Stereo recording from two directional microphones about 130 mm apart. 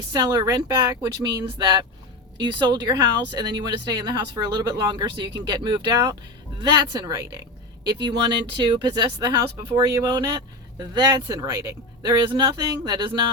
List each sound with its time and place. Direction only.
0.1 s speech: 30° right (ahead or behind)
8.6 s speech: 35° right (ahead or behind)